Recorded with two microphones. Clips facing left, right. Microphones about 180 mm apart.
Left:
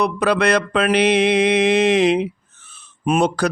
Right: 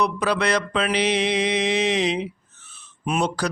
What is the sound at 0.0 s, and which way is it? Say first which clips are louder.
A man's voice: left 4 dB; 55° left (ahead or behind).